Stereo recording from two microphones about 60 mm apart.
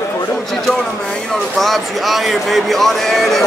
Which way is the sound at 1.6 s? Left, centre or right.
Centre.